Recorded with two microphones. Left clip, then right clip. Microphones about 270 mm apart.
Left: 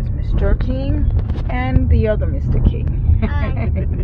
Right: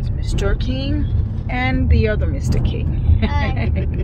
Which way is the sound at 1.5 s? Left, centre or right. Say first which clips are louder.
Right 2 dB; centre.